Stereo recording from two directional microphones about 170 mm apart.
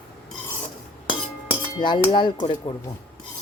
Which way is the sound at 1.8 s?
25° left (ahead or behind).